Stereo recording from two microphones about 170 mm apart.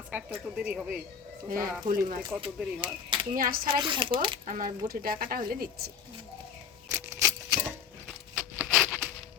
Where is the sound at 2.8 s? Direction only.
30° right (ahead or behind).